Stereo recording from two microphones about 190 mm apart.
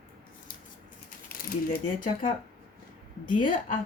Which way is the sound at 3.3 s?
45° left (ahead or behind).